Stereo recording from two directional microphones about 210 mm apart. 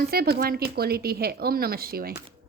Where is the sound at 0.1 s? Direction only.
45° right (ahead or behind).